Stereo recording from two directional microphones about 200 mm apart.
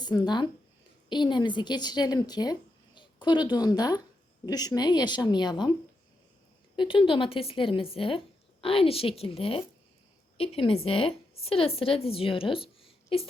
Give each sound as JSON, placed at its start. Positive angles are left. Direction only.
{"t": 0.0, "sound": "a woman's voice", "side_deg": 20}
{"t": 6.7, "sound": "a woman's voice", "side_deg": 25}